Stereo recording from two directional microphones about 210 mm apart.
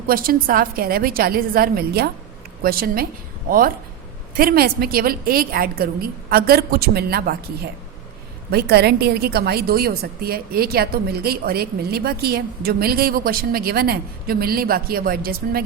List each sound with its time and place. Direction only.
0.1 s a woman's voice: 45° right (ahead or behind)
4.4 s a woman's voice: 45° right (ahead or behind)